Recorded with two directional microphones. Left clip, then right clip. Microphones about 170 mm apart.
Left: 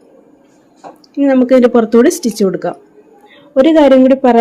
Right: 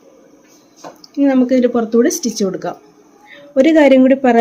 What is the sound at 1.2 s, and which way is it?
Speech, 25° left (ahead or behind).